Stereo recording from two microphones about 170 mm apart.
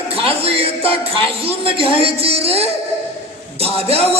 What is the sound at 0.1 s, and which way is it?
Music, 35° right (ahead or behind).